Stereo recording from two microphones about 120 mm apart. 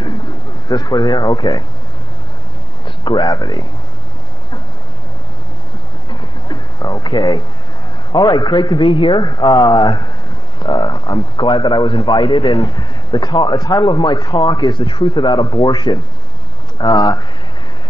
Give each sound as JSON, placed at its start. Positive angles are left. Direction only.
{"t": 0.7, "sound": "a man's voice", "side_deg": 35}
{"t": 3.0, "sound": "a man's voice", "side_deg": 40}
{"t": 6.0, "sound": "a sound", "side_deg": 35}
{"t": 8.1, "sound": "a man's voice", "side_deg": 35}